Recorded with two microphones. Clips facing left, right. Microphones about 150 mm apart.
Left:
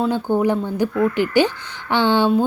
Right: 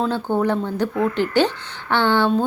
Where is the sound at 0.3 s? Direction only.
10° left (ahead or behind).